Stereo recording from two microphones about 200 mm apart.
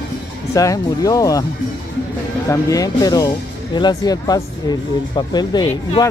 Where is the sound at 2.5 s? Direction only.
15° left (ahead or behind).